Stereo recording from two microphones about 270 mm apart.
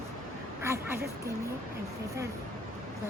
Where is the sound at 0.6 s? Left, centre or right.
Centre.